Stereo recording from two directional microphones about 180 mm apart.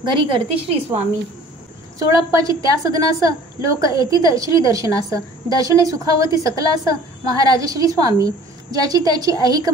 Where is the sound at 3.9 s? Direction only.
20° right (ahead or behind).